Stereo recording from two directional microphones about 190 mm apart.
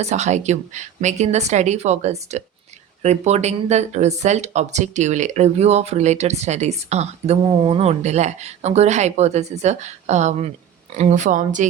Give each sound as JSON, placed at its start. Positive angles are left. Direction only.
{"t": 0.0, "sound": "speech", "side_deg": -35}